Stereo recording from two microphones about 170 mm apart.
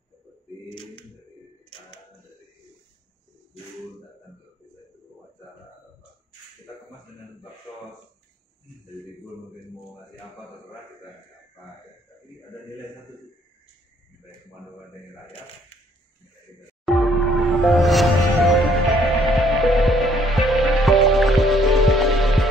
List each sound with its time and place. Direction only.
0.7 s typewriter: 30° left (ahead or behind)
16.8 s music: centre (ahead or behind)